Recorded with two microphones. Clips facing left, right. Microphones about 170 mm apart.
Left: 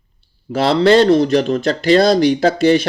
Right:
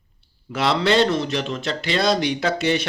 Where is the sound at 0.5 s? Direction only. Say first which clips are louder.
Left 7 dB; 35° left (ahead or behind).